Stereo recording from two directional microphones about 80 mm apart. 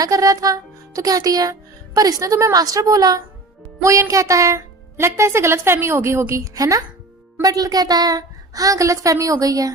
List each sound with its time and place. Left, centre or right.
0.0 s music: right
3.8 s music: right
4.1 s speech: right